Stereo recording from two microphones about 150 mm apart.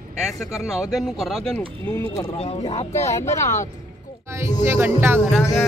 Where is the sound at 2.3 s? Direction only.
40° left (ahead or behind).